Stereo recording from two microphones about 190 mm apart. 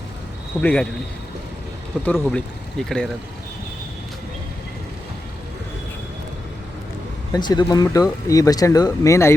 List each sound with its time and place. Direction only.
0.6 s speech: 10° left (ahead or behind)
2.0 s speech: 5° left (ahead or behind)
7.3 s speech: 20° left (ahead or behind)